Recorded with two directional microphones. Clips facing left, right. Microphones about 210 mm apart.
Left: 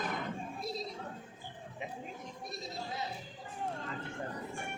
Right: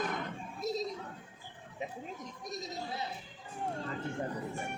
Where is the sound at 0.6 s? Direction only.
45° right (ahead or behind).